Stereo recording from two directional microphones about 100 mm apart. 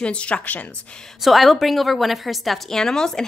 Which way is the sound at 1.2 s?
Centre (ahead or behind).